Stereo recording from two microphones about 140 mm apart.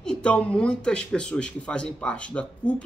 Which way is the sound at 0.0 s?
5° left (ahead or behind).